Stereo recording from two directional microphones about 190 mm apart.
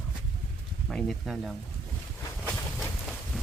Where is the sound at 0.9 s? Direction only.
Centre (ahead or behind).